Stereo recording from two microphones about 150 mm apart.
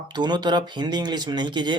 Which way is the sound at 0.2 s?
30° right (ahead or behind).